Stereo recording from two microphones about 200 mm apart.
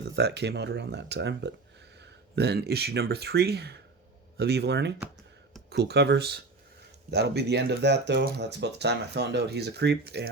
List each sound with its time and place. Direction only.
0.2 s speech: 55° right (ahead or behind)